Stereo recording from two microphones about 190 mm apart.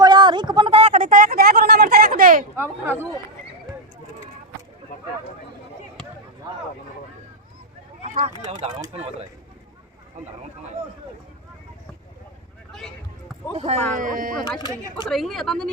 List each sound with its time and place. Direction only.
0.0 s a sound: 25° right (ahead or behind); by 2.4 s 50° right (ahead or behind)
2.6 s speech: 10° right (ahead or behind)
8.0 s speech: 40° right (ahead or behind)
12.7 s a sound: centre (ahead or behind)
13.9 s speech: 45° right (ahead or behind)
15.0 s a woman's voice: centre (ahead or behind)